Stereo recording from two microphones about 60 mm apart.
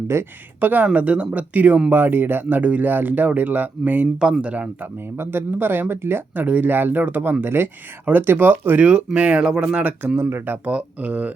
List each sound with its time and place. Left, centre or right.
0.1 s speech: right
0.6 s speech: right
4.2 s speech: centre
5.1 s speech: right
8.8 s speech: centre
10.2 s speech: right
10.7 s speech: right